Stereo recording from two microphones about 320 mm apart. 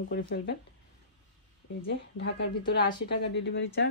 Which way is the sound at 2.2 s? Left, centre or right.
Left.